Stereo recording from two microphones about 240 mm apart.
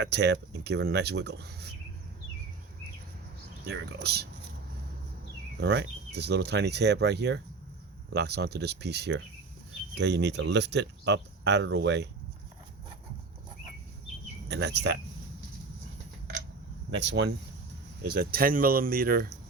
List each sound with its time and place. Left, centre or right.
0.0 s speech: right
3.7 s speech: right
5.5 s speech: right
14.4 s speech: right
17.0 s speech: right